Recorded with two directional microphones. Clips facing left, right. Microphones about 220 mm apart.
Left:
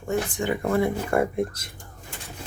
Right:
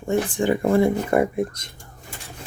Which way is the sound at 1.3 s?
5° left (ahead or behind).